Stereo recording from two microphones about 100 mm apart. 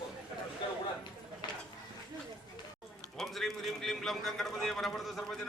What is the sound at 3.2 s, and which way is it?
A man's voice, centre (ahead or behind).